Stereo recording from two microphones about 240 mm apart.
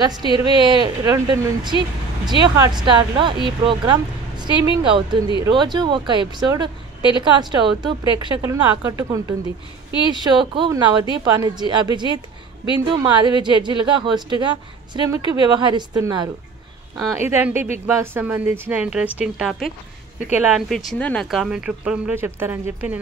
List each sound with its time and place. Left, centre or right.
0.0 s a woman's voice: centre